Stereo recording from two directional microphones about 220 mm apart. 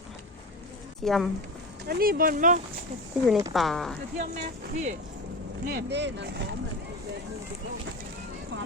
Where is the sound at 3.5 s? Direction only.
Centre (ahead or behind).